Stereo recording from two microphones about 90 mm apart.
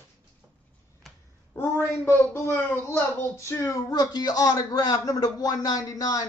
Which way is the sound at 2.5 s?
25° left (ahead or behind).